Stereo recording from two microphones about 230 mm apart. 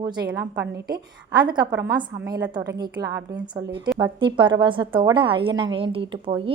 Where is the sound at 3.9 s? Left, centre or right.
Centre.